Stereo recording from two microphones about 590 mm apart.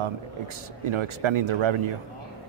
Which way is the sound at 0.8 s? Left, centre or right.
Right.